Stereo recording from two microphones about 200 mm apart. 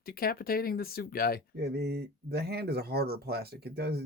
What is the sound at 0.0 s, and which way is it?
Speech, 50° left (ahead or behind).